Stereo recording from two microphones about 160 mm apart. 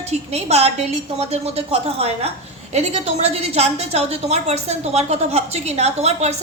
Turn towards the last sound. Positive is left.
turn(degrees=-40)  # may be behind; listen again after turning